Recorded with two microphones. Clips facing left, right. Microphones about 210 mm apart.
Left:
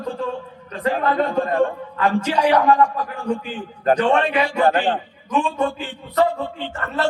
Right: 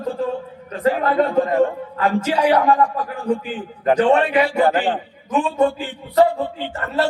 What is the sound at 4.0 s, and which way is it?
A man's voice, 10° right (ahead or behind).